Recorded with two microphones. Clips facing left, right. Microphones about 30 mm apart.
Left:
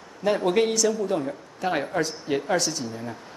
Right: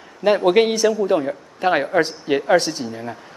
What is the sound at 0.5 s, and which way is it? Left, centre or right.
Speech, right.